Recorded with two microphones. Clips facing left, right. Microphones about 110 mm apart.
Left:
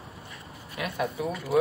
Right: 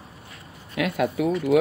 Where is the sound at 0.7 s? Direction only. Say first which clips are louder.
Right 7 dB; 90° right.